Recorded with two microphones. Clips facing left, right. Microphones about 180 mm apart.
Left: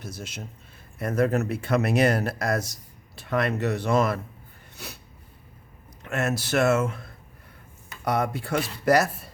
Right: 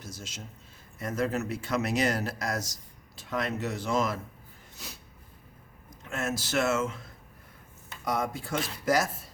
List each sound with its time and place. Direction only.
0.0 s speech: 60° left (ahead or behind)
6.0 s speech: 65° left (ahead or behind)